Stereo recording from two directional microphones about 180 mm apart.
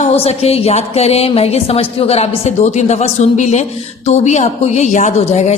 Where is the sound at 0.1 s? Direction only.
35° left (ahead or behind).